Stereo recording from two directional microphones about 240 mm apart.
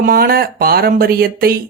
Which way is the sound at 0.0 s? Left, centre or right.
Right.